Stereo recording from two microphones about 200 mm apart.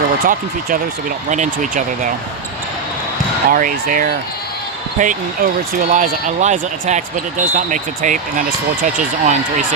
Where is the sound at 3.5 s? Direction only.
45° right (ahead or behind).